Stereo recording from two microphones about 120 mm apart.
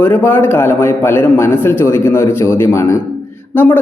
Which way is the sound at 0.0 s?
20° left (ahead or behind).